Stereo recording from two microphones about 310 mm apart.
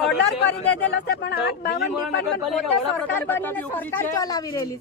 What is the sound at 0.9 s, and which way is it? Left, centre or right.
Speech, left.